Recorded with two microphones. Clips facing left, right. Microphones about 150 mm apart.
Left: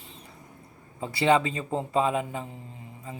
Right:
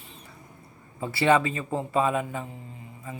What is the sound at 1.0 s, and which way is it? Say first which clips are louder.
Speech: right 1 dB; 20° left (ahead or behind).